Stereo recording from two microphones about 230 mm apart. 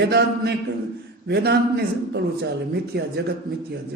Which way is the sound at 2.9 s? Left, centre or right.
Right.